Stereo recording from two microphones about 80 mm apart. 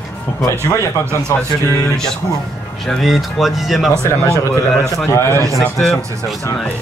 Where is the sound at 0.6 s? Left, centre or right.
Left.